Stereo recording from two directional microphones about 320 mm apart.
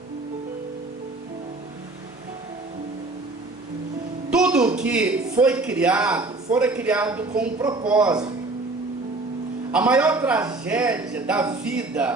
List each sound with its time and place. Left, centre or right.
4.4 s a sound: centre
4.8 s a man's voice: centre
9.7 s a man's voice: centre